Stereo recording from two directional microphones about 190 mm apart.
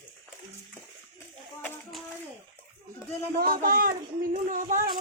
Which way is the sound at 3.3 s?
50° right (ahead or behind).